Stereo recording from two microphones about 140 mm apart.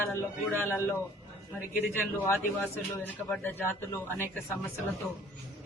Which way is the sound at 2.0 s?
15° left (ahead or behind).